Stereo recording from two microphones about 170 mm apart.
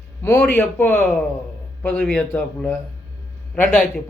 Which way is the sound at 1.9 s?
Centre (ahead or behind).